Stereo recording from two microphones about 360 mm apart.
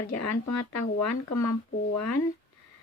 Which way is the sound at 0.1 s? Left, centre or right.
Left.